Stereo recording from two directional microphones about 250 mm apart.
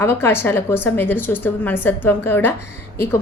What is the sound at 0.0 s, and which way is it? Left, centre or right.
A woman's voice, centre.